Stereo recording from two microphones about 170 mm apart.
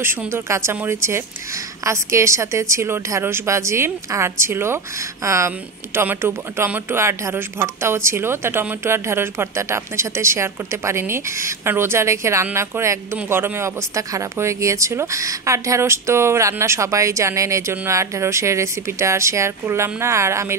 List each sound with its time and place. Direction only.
0.0 s speech: 15° right (ahead or behind)